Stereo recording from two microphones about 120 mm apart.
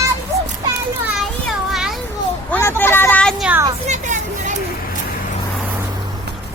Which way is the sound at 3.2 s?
5° left (ahead or behind).